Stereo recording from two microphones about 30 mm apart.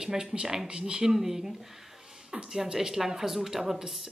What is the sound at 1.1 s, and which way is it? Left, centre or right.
A woman's voice, centre.